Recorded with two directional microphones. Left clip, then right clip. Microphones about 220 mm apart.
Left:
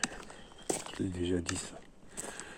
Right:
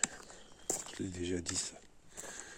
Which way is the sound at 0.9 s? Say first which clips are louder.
Left 6 dB; 25° right (ahead or behind).